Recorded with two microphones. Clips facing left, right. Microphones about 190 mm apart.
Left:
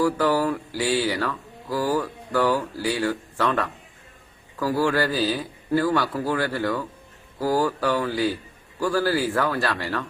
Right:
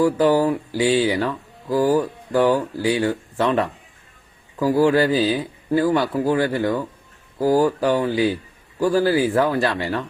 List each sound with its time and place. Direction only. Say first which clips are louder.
0.0 s speech: right 5 dB; 20° right (ahead or behind)